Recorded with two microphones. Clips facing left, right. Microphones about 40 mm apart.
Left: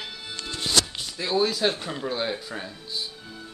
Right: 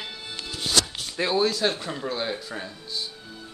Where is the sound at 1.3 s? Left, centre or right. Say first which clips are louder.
Left 1 dB; centre.